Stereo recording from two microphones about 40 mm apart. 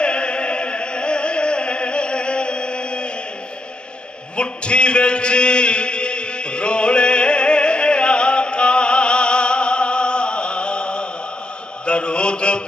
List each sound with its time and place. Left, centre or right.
0.0 s music: left
4.4 s a sound: left
11.8 s mantra: left